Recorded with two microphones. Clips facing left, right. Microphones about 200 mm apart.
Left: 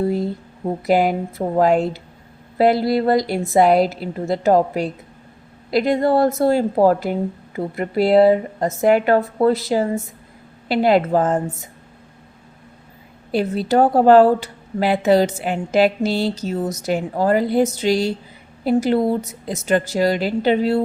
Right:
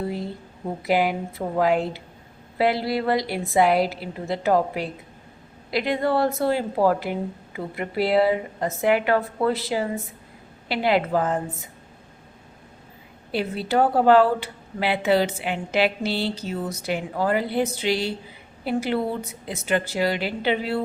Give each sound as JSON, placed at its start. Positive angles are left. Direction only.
{"t": 0.9, "sound": "speech", "side_deg": 45}
{"t": 13.3, "sound": "a woman's voice", "side_deg": 40}